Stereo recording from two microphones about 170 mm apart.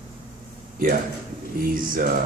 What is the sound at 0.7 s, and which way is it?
Speech, 60° right (ahead or behind).